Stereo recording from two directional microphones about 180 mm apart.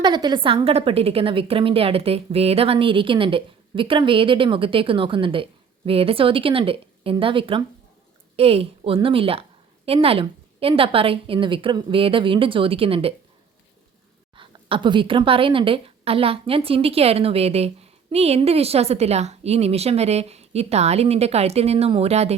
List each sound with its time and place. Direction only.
0.0 s a woman's voice: 25° right (ahead or behind)
14.3 s a woman's voice: 25° right (ahead or behind)